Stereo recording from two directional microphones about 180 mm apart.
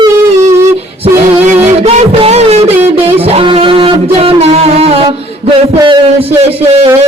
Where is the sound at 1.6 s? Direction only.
40° right (ahead or behind).